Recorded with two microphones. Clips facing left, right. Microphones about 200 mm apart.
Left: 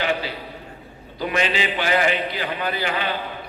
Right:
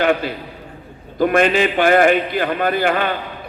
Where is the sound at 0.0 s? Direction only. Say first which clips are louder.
Right 7 dB; 55° right (ahead or behind).